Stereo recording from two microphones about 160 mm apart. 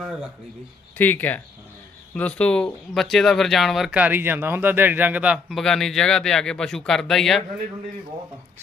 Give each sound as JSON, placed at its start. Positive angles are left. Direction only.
{"t": 0.9, "sound": "speech", "side_deg": 10}